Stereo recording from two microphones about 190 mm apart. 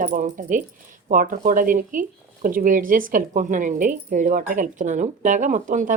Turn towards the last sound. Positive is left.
turn(degrees=-45)  # may be behind; listen again after turning